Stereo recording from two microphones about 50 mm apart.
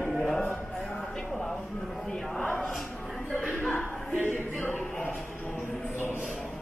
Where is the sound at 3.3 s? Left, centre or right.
Left.